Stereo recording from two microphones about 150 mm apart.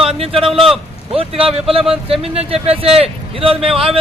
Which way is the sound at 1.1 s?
40° right (ahead or behind).